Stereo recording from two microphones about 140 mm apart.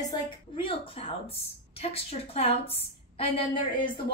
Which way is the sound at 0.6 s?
40° left (ahead or behind).